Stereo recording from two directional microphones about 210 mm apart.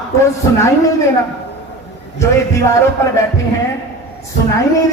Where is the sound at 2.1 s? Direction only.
15° left (ahead or behind).